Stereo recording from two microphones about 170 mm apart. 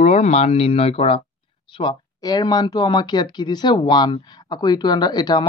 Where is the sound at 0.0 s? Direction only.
40° left (ahead or behind).